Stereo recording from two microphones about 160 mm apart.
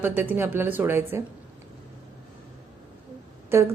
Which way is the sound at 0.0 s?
10° right (ahead or behind).